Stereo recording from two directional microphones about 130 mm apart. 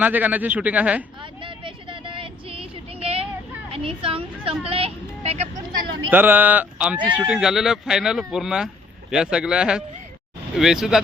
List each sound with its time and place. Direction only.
0.0 s speech: 10° right (ahead or behind)
1.2 s a sound: 40° right (ahead or behind)
3.7 s speech: 45° right (ahead or behind)
6.1 s speech: 15° right (ahead or behind)